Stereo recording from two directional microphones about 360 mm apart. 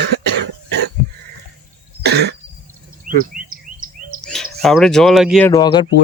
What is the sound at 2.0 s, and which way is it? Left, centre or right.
Cough, right.